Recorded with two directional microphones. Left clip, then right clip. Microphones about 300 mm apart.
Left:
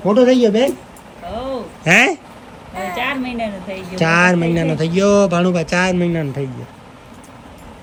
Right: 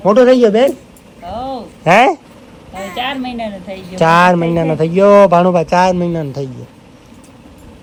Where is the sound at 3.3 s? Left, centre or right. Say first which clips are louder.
Right 1 dB; centre.